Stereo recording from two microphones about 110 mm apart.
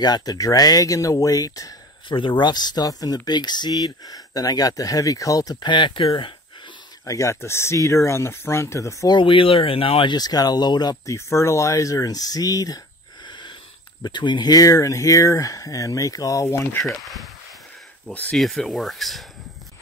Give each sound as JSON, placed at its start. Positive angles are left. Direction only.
{"t": 0.0, "sound": "speech", "side_deg": 35}
{"t": 2.0, "sound": "speech", "side_deg": 50}
{"t": 7.1, "sound": "speech", "side_deg": 25}
{"t": 9.1, "sound": "speech", "side_deg": 50}
{"t": 10.1, "sound": "speech", "side_deg": 40}
{"t": 11.1, "sound": "speech", "side_deg": 25}
{"t": 13.3, "sound": "a sound", "side_deg": 45}
{"t": 14.0, "sound": "speech", "side_deg": 45}
{"t": 16.4, "sound": "speech", "side_deg": 20}
{"t": 16.8, "sound": "speech", "side_deg": 0}
{"t": 18.1, "sound": "speech", "side_deg": 15}
{"t": 18.4, "sound": "speech", "side_deg": 0}